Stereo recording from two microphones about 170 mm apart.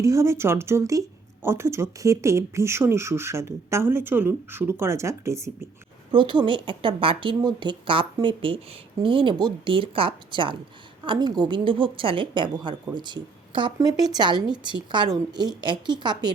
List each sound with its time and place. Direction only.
0.0 s speech: 20° right (ahead or behind)
6.1 s a woman's voice: 25° right (ahead or behind)